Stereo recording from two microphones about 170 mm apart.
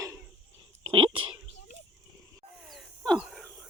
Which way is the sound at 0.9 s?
30° right (ahead or behind).